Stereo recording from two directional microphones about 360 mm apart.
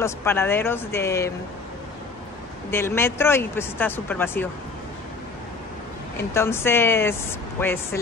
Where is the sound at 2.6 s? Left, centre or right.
Centre.